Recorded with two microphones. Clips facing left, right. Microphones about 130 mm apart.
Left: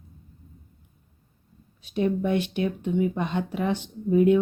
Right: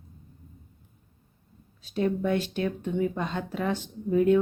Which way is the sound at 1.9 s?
15° left (ahead or behind).